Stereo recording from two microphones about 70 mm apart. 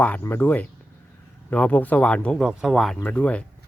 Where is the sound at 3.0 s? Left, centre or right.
Centre.